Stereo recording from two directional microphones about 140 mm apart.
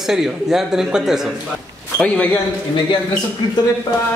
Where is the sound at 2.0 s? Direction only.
10° left (ahead or behind).